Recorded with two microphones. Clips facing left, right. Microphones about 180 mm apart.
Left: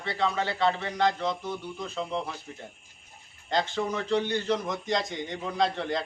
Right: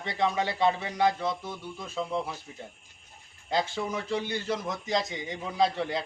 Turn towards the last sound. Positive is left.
turn(degrees=-5)  # may be behind; listen again after turning